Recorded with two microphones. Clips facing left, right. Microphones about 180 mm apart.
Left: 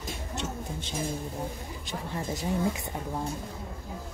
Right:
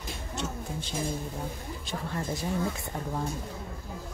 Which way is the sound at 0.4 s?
20° left (ahead or behind).